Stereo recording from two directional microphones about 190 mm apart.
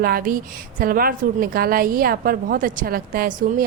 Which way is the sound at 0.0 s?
50° right (ahead or behind).